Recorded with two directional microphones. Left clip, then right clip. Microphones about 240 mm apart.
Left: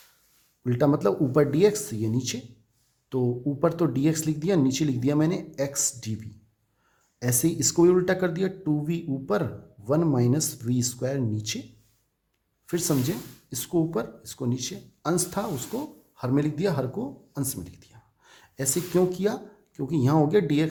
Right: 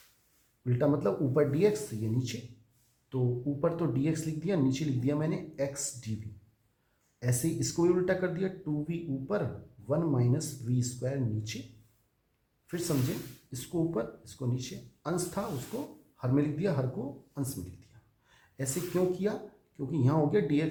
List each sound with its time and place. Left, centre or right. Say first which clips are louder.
0.6 s speech: left 6 dB; left
7.2 s speech: left 7 dB; left
12.6 s speech: left 7 dB; left